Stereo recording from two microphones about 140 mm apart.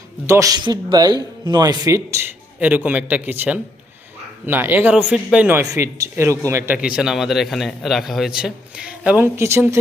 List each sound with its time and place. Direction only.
0.3 s a man's voice: 25° right (ahead or behind)